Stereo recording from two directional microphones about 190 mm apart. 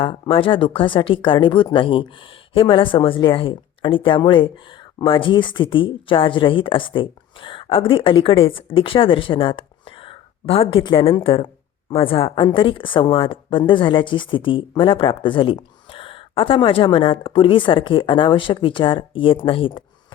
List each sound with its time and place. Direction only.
0.0 s speech: 25° left (ahead or behind)